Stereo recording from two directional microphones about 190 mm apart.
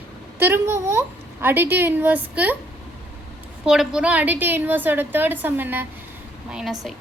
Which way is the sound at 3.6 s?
5° right (ahead or behind).